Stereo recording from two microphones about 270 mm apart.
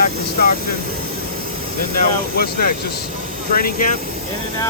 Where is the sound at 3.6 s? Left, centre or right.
Left.